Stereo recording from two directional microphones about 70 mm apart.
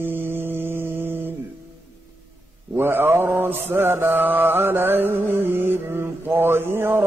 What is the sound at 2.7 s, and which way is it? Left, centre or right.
Mantra, right.